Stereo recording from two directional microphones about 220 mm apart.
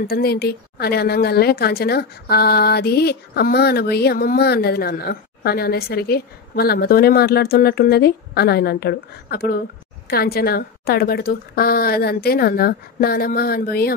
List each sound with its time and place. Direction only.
0.0 s a woman's voice: 45° left (ahead or behind)